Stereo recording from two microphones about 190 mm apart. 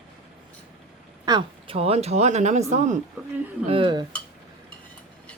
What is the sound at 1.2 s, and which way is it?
Speech, 25° right (ahead or behind).